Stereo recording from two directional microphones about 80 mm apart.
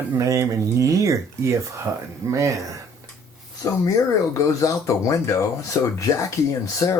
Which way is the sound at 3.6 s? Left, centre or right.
Left.